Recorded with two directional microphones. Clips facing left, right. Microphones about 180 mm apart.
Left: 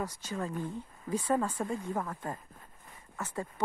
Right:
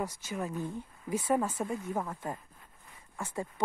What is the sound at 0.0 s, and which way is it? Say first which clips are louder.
Speech: even; 15° right (ahead or behind).